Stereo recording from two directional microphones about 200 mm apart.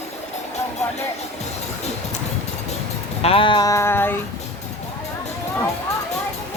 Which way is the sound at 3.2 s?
30° left (ahead or behind).